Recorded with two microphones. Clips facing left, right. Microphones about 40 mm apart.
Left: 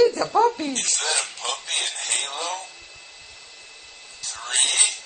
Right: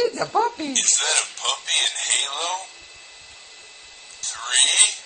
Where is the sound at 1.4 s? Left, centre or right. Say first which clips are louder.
Right 4 dB; right.